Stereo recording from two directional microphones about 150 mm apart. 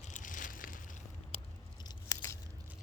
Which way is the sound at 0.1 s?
60° left (ahead or behind).